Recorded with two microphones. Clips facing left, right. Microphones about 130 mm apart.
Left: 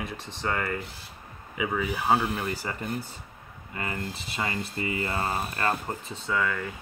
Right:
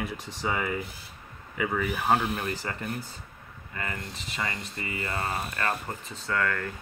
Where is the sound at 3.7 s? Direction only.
30° left (ahead or behind).